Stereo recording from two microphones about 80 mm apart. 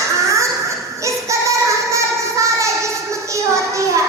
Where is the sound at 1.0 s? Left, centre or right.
Right.